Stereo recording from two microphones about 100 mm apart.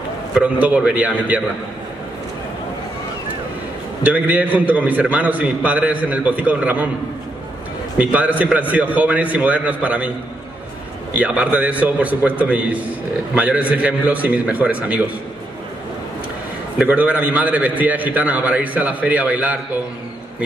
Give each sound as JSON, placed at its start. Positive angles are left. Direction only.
{"t": 0.3, "sound": "a man's voice", "side_deg": -15}
{"t": 4.0, "sound": "a man's voice", "side_deg": -15}
{"t": 8.0, "sound": "a man's voice", "side_deg": -15}
{"t": 11.1, "sound": "a man's voice", "side_deg": -15}
{"t": 16.7, "sound": "a man's voice", "side_deg": -15}